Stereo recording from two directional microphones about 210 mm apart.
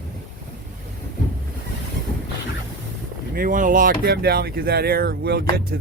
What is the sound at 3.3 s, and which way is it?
Speech, 40° right (ahead or behind).